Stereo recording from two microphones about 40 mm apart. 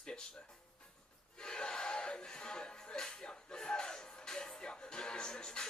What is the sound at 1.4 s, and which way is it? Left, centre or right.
Music, centre.